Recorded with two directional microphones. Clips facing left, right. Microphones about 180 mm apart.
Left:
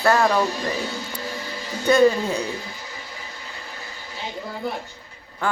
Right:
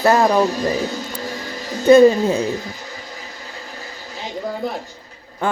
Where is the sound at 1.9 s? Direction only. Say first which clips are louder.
Right 7 dB; 25° right (ahead or behind).